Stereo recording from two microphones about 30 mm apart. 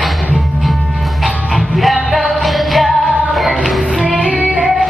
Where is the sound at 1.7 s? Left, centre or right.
Centre.